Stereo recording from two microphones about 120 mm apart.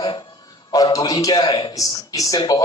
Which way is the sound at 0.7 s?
30° left (ahead or behind).